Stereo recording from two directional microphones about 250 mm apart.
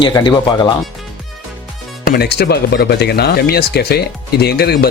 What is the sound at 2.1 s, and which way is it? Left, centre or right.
Speech, left.